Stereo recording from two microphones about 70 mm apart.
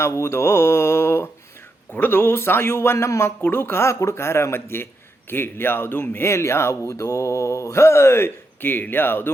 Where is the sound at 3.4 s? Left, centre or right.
Left.